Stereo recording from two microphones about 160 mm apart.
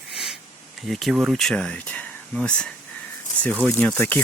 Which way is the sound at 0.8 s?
Centre (ahead or behind).